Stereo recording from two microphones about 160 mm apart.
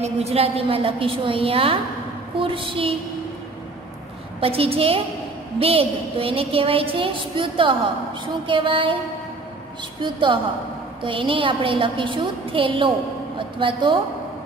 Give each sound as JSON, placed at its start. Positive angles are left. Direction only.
{"t": 0.0, "sound": "a woman's voice", "side_deg": -40}
{"t": 4.4, "sound": "a woman's voice", "side_deg": -35}
{"t": 10.0, "sound": "a woman's voice", "side_deg": -30}